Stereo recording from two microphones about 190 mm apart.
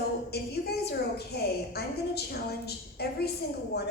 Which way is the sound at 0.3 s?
55° left (ahead or behind).